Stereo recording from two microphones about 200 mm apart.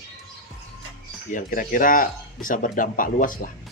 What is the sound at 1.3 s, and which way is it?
Speech, 40° left (ahead or behind).